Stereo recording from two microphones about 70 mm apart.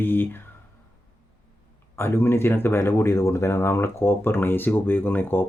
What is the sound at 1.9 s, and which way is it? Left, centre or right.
Speech, left.